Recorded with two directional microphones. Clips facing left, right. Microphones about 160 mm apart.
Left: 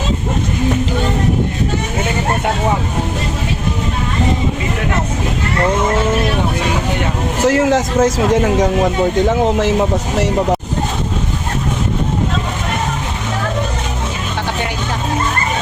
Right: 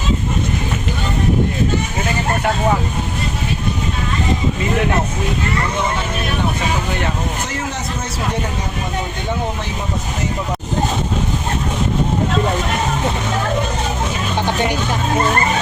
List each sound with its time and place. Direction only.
7.4 s a man's voice: 90° left